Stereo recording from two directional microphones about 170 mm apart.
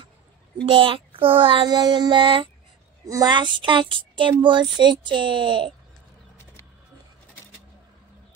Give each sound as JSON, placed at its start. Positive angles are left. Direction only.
{"t": 0.7, "sound": "a child's voice", "side_deg": -30}